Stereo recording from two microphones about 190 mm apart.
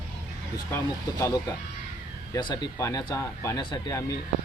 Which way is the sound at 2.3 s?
20° left (ahead or behind).